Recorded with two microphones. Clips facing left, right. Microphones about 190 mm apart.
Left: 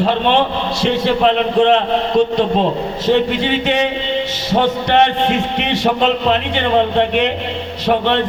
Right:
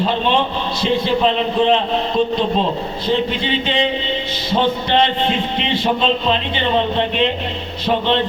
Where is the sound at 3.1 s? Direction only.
70° left (ahead or behind).